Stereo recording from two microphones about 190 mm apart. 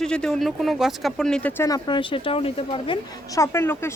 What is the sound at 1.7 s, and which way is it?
A woman's voice, 25° left (ahead or behind).